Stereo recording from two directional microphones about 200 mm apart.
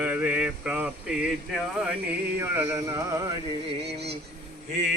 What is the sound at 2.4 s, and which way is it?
Speech, 15° right (ahead or behind).